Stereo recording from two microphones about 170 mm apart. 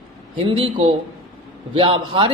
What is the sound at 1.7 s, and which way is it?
Speech, 30° right (ahead or behind).